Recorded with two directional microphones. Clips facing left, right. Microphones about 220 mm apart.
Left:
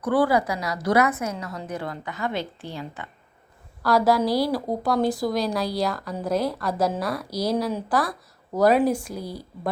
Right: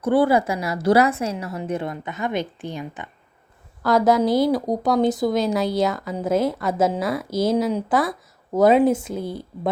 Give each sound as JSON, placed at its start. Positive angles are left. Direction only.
{"t": 0.0, "sound": "a woman's voice", "side_deg": -25}